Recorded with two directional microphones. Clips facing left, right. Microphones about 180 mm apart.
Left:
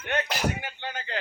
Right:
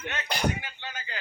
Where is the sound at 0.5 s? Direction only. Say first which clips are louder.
Left 4 dB; 55° left (ahead or behind).